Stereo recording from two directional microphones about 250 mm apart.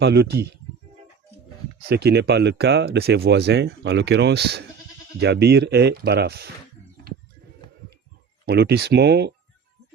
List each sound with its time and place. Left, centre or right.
0.0 s speech: right
1.9 s speech: right
8.4 s speech: right